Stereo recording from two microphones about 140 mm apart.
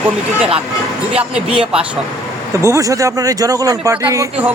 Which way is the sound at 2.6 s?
20° right (ahead or behind).